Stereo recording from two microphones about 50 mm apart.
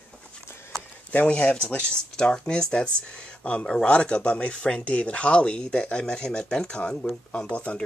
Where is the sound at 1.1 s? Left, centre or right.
Left.